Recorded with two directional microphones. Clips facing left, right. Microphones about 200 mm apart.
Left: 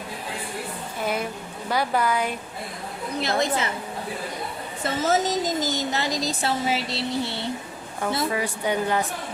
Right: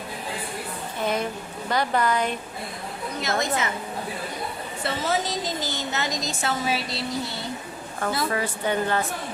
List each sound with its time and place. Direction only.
1.0 s a sound: 10° left (ahead or behind)
1.7 s a woman's voice: 10° left (ahead or behind)
3.2 s a woman's voice: 30° left (ahead or behind)
4.8 s a woman's voice: 45° left (ahead or behind); by 7.3 s 25° left (ahead or behind)
8.3 s a woman's voice: 15° left (ahead or behind)